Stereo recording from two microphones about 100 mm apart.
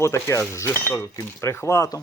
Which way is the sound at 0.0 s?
30° left (ahead or behind).